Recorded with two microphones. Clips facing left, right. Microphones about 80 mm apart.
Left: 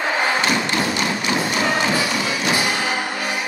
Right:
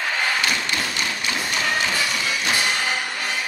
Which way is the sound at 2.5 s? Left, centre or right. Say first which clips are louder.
Left 2 dB; centre.